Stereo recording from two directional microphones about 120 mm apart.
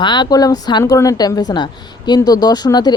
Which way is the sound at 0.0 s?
40° left (ahead or behind).